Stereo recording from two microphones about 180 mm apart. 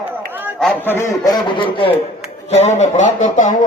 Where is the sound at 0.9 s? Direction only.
15° left (ahead or behind).